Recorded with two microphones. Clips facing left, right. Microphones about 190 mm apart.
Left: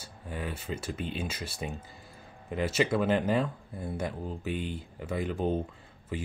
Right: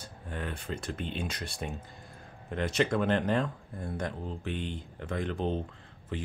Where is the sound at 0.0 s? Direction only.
5° left (ahead or behind).